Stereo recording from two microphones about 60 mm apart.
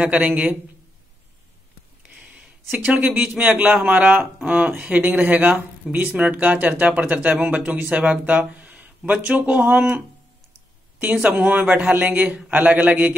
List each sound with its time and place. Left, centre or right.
0.0 s speech: right
2.8 s speech: right
11.2 s speech: right